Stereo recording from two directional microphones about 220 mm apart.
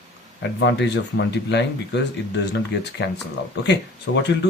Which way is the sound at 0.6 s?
55° left (ahead or behind).